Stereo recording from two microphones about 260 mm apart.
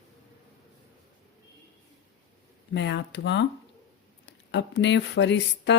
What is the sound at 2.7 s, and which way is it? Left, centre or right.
Speech, left.